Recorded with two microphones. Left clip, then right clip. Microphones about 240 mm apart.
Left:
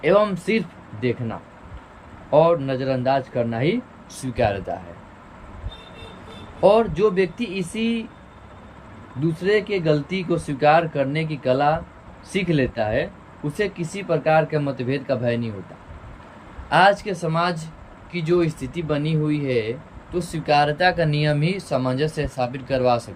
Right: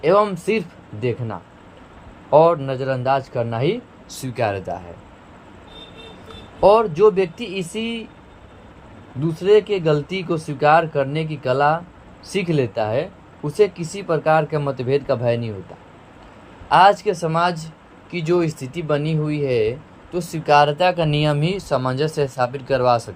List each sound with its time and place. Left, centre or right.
0.0 s speech: right
2.3 s speech: right
6.6 s speech: right
9.4 s speech: right
16.6 s speech: centre